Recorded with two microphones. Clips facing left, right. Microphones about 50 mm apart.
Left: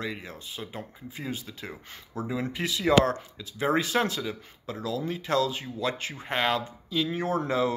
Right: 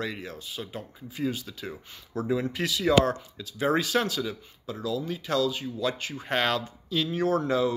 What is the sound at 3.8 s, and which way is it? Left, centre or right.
Speech, left.